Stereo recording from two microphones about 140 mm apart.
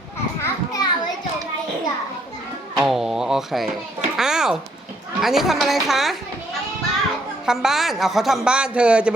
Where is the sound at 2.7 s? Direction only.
Centre (ahead or behind).